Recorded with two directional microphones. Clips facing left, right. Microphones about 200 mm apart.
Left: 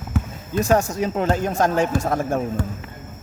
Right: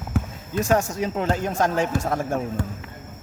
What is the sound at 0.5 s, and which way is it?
Speech, 35° left (ahead or behind).